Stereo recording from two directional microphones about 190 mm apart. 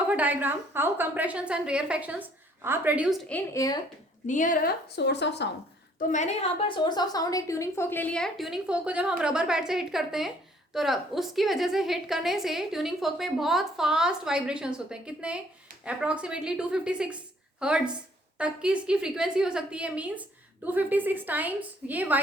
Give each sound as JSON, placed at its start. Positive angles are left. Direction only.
{"t": 0.1, "sound": "a woman's voice", "side_deg": -10}
{"t": 3.2, "sound": "a woman's voice", "side_deg": 10}
{"t": 4.3, "sound": "a woman's voice", "side_deg": 45}
{"t": 6.0, "sound": "a woman's voice", "side_deg": 40}